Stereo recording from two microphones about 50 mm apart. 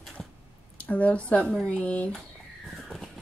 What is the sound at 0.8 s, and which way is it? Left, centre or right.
Speech, left.